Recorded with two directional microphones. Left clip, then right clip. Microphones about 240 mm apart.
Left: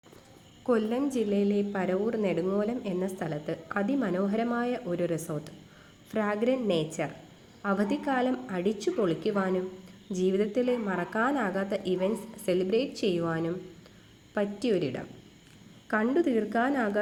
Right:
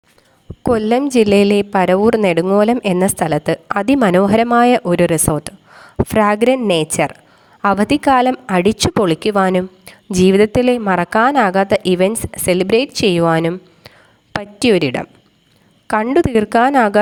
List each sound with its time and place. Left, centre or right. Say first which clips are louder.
0.7 s a woman's voice: right 13 dB; right